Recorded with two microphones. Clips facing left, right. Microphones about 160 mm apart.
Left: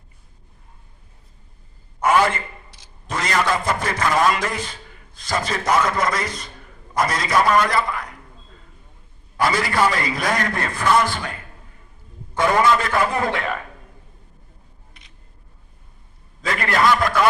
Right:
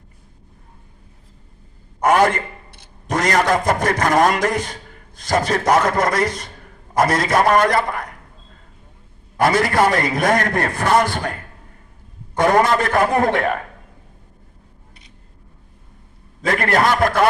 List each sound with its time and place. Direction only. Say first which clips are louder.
2.0 s a man's voice: right 3 dB; 50° right (ahead or behind)
9.4 s a man's voice: right 4 dB; 50° right (ahead or behind)
12.4 s a man's voice: right 2 dB; 45° right (ahead or behind)
16.4 s a man's voice: right 3 dB; 50° right (ahead or behind)